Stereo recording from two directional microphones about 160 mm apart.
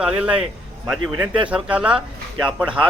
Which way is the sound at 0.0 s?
5° right (ahead or behind).